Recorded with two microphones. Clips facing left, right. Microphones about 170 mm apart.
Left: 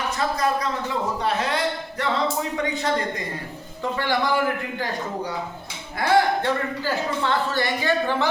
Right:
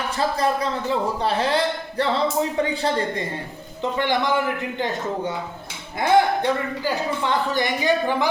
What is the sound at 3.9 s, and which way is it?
A man's voice, 20° right (ahead or behind).